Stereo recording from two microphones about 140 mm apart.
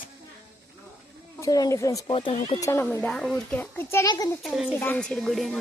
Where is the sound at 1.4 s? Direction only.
25° left (ahead or behind).